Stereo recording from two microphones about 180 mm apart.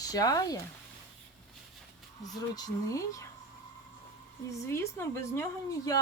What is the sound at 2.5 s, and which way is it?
Speech, 20° left (ahead or behind).